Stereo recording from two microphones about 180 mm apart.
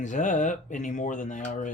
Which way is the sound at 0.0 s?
45° left (ahead or behind).